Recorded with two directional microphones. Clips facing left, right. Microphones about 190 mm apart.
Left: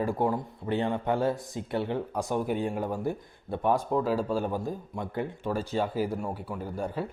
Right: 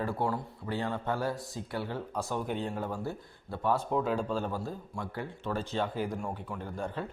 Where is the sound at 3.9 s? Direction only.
Centre (ahead or behind); by 5.5 s 20° left (ahead or behind).